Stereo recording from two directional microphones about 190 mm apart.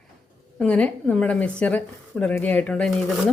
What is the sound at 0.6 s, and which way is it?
Speech, 5° left (ahead or behind).